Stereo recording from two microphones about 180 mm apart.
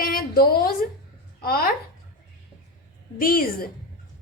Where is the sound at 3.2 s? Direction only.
55° left (ahead or behind).